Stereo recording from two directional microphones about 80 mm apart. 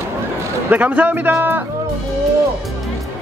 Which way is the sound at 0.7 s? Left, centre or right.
Centre.